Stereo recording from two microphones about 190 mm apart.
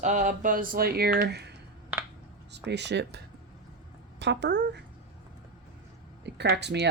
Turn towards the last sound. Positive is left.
turn(degrees=-65)  # may be behind; listen again after turning